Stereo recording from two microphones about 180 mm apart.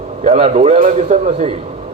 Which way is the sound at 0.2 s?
35° right (ahead or behind).